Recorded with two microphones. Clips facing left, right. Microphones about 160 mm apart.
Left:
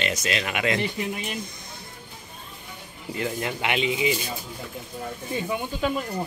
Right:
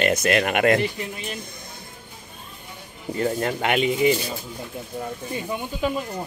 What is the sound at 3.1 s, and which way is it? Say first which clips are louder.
Speech: right 5 dB; 40° right (ahead or behind).